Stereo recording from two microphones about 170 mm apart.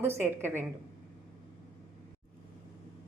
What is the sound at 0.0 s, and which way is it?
Speech, 15° right (ahead or behind).